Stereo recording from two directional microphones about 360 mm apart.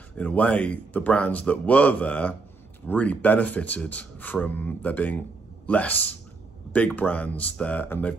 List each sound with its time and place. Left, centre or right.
0.2 s speech: centre